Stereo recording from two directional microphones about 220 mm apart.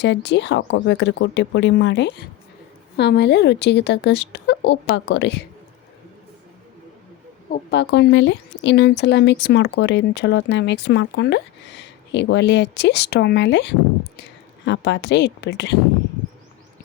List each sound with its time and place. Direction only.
0.0 s speech: 50° left (ahead or behind)
7.5 s speech: 50° left (ahead or behind)